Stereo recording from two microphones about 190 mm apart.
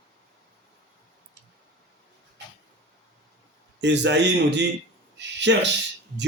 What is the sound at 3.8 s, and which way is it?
Speech, 65° right (ahead or behind).